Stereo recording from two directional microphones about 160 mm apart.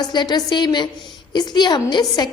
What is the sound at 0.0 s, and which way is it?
A woman's voice, 25° left (ahead or behind).